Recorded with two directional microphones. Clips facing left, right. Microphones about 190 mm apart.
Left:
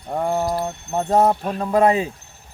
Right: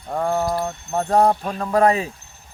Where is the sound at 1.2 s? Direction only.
5° left (ahead or behind).